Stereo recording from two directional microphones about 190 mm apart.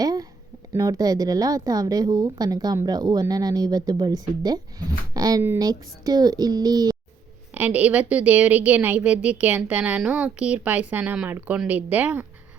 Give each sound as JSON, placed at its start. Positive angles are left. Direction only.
{"t": 0.0, "sound": "a sound", "side_deg": -20}
{"t": 0.7, "sound": "a woman's voice", "side_deg": -20}
{"t": 7.5, "sound": "a woman's voice", "side_deg": -10}